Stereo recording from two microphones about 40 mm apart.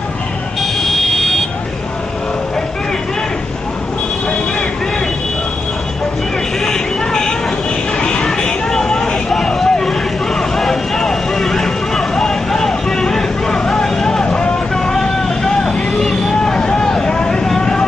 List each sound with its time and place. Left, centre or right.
6.6 s vehicle: centre
8.0 s a sound: left
8.3 s vehicle: centre
16.5 s vehicle: centre